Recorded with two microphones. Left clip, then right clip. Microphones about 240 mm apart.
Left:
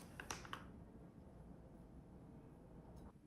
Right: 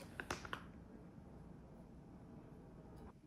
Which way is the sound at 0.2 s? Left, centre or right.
Right.